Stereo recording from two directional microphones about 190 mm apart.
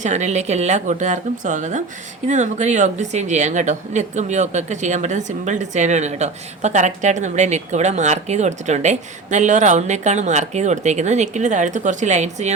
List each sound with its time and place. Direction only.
0.0 s a woman's voice: 40° right (ahead or behind)